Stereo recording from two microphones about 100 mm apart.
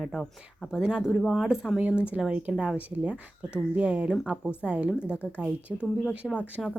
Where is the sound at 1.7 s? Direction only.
15° right (ahead or behind).